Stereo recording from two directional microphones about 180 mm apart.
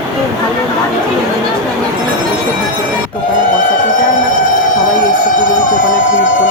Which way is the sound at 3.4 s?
45° left (ahead or behind).